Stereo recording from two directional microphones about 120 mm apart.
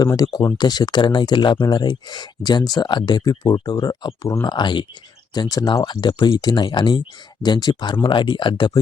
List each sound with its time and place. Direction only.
0.0 s speech: 30° left (ahead or behind)